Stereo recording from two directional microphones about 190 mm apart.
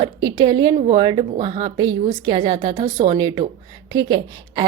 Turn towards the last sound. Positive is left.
turn(degrees=-20)  # may be behind; listen again after turning